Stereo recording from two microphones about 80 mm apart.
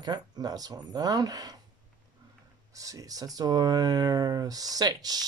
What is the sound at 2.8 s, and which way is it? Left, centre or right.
Speech, right.